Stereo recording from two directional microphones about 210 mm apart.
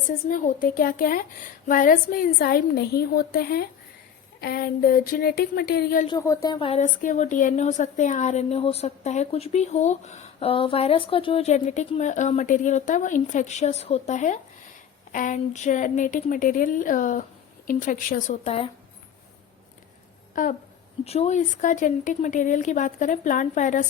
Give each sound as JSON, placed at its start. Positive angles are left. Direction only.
{"t": 0.3, "sound": "a woman's voice", "side_deg": 40}
{"t": 6.1, "sound": "speech", "side_deg": 15}
{"t": 20.3, "sound": "speech", "side_deg": 40}